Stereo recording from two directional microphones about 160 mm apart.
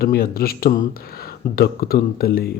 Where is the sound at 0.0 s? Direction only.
70° left (ahead or behind).